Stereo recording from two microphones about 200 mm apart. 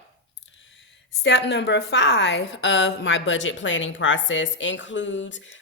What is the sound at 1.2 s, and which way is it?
A woman's voice, 60° left (ahead or behind).